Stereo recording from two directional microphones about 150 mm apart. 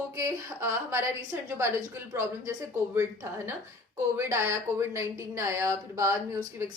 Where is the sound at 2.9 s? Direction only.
15° right (ahead or behind).